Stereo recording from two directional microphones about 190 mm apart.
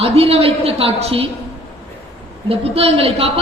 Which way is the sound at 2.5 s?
30° right (ahead or behind).